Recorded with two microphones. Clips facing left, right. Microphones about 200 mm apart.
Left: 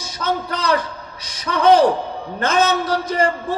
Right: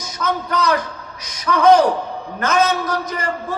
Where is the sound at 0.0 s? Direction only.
30° left (ahead or behind).